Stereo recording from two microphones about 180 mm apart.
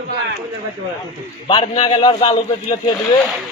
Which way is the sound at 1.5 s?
30° left (ahead or behind).